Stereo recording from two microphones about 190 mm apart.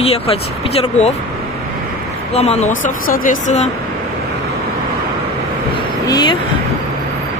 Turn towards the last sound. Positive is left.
turn(degrees=25)  # may be behind; listen again after turning